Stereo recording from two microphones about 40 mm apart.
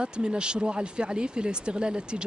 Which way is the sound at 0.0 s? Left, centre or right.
Right.